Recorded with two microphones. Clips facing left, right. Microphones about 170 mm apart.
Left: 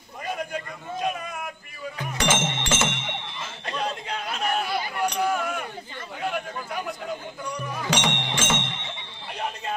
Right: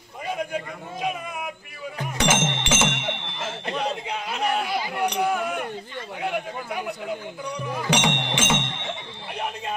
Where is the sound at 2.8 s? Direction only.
70° right (ahead or behind).